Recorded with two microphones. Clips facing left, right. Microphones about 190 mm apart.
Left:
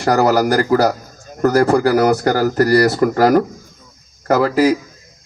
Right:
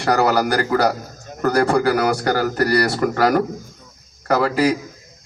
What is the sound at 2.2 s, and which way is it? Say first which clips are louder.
Speech: left 4 dB; 35° left (ahead or behind).